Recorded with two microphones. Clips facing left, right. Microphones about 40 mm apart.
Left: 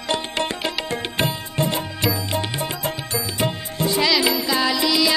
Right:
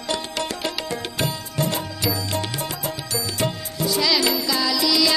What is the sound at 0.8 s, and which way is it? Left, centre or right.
Music, left.